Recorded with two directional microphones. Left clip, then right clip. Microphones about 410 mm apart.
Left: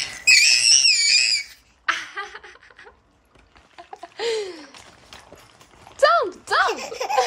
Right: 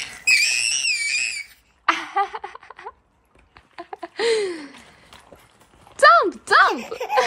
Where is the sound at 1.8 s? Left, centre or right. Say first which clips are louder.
Right 5 dB; centre.